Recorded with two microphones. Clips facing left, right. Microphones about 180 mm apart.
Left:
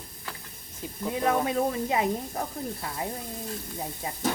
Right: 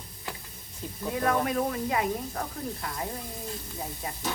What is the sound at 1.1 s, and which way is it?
Speech, 20° left (ahead or behind).